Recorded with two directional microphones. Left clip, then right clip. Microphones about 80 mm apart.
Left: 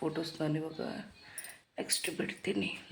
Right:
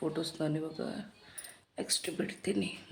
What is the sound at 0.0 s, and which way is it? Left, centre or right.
Speech, right.